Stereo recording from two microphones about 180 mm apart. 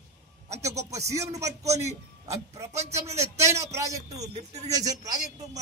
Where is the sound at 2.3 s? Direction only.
15° right (ahead or behind).